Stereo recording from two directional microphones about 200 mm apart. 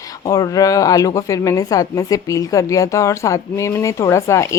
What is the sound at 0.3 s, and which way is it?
Speech, 20° left (ahead or behind).